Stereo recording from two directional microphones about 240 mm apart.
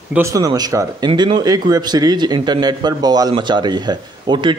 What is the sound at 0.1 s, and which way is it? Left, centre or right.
Speech, centre.